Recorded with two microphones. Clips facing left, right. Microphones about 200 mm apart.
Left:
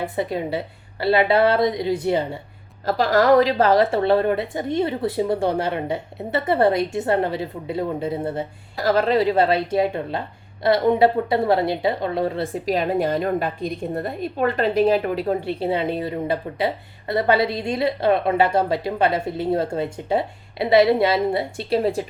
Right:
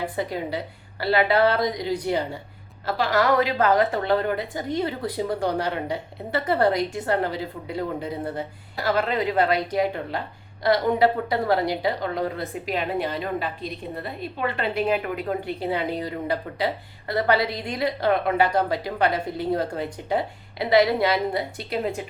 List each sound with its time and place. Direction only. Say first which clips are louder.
0.0 s a woman's voice: left 3 dB; 25° left (ahead or behind)
2.8 s a woman's voice: left 5 dB; 40° left (ahead or behind)
8.8 s a woman's voice: left 5 dB; 35° left (ahead or behind)
12.6 s a woman's voice: left 5 dB; 40° left (ahead or behind)